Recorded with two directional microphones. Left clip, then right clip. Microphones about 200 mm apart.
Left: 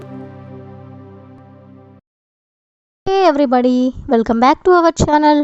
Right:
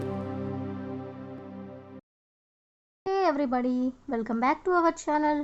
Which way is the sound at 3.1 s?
40° left (ahead or behind).